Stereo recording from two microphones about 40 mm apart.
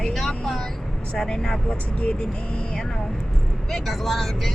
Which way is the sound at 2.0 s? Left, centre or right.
Left.